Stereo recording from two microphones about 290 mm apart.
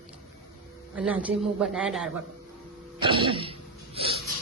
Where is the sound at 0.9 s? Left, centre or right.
Centre.